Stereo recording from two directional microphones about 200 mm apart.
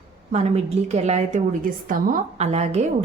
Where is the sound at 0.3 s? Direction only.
35° right (ahead or behind).